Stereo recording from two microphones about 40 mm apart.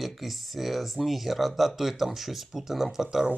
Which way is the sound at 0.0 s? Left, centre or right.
Centre.